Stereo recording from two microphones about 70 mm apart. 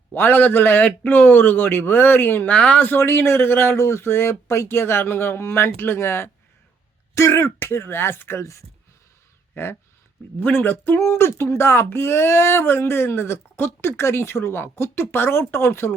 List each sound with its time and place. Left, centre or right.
0.1 s a man's voice: left
2.5 s a man's voice: centre
2.9 s speech: left